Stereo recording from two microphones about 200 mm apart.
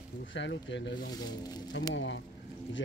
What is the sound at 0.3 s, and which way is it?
Speech, 65° left (ahead or behind).